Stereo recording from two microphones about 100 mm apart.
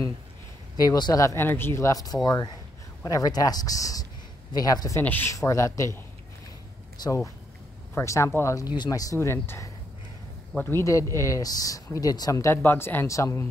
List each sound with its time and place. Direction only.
0.7 s speech: 45° left (ahead or behind)
1.2 s speech: 25° left (ahead or behind)
1.9 s a man's voice: 35° left (ahead or behind)
5.0 s speech: 20° left (ahead or behind)
5.3 s speech: 35° left (ahead or behind)
7.0 s speech: 40° left (ahead or behind)
7.9 s speech: 30° left (ahead or behind)
8.7 s speech: 40° left (ahead or behind)
12.6 s speech: 20° left (ahead or behind)